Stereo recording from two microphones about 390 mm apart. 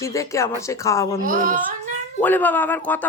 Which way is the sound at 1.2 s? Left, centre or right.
Right.